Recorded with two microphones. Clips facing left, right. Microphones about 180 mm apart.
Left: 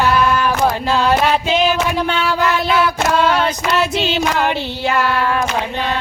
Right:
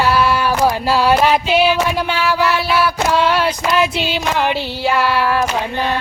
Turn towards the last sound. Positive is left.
turn(degrees=-10)  # may be behind; listen again after turning